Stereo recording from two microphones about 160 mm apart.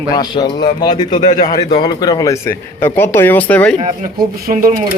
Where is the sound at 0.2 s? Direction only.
25° left (ahead or behind); by 3.8 s 10° left (ahead or behind).